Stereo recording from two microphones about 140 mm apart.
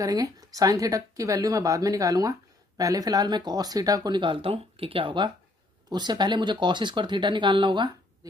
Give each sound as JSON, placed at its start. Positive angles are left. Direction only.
{"t": 0.0, "sound": "speech", "side_deg": -25}